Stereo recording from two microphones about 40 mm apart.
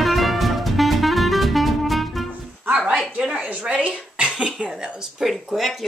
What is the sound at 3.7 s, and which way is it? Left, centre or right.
Music, right.